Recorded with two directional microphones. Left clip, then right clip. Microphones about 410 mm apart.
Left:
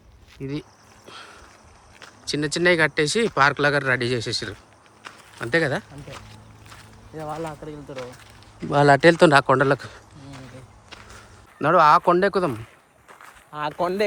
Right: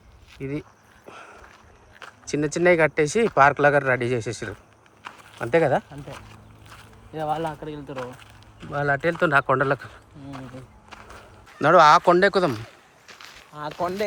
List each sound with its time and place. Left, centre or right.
0.3 s speech: centre
1.0 s a sound: centre
2.0 s speech: centre
7.2 s speech: right
8.7 s speech: centre
11.6 s speech: centre
13.5 s speech: left